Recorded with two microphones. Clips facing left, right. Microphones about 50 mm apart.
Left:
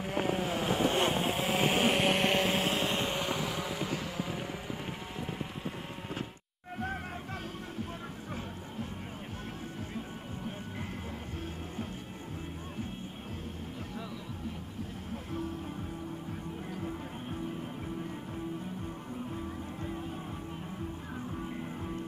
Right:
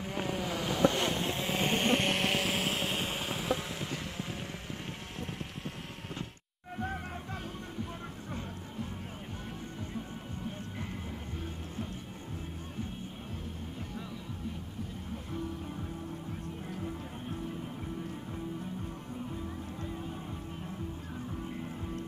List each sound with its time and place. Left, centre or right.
0.1 s boat: left
1.2 s vehicle: centre
3.5 s boat: centre